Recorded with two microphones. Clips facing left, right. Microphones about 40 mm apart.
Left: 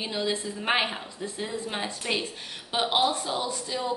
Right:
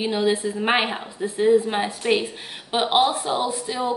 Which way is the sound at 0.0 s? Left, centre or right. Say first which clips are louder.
Right 8 dB; right.